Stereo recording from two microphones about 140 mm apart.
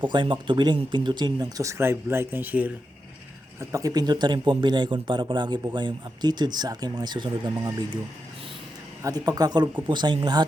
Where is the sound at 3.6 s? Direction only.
25° right (ahead or behind).